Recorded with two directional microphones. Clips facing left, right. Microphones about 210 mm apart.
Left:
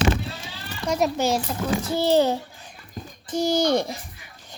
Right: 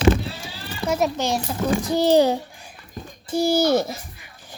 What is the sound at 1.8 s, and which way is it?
Speech, 15° right (ahead or behind).